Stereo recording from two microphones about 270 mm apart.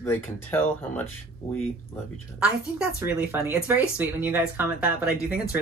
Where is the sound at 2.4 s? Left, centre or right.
Centre.